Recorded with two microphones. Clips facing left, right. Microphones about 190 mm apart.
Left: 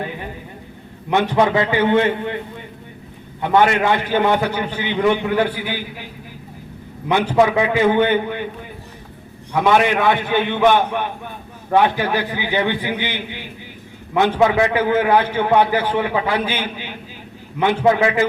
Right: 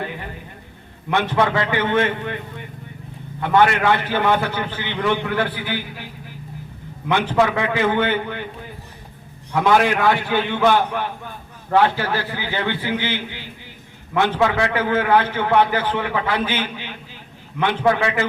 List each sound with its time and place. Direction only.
1.1 s a man's voice: 15° left (ahead or behind)
3.4 s a man's voice: 15° left (ahead or behind)
7.1 s a man's voice: 15° left (ahead or behind)
9.6 s a man's voice: 20° left (ahead or behind)